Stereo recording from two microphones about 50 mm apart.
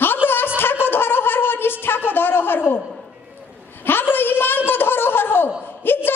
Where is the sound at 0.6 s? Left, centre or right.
Left.